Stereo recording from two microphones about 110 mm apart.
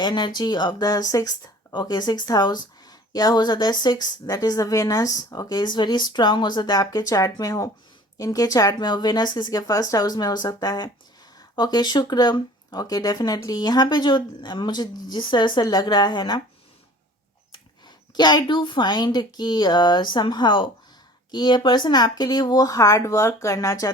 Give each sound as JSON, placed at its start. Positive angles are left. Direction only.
{"t": 0.0, "sound": "speech", "side_deg": 40}
{"t": 17.5, "sound": "a woman's voice", "side_deg": 40}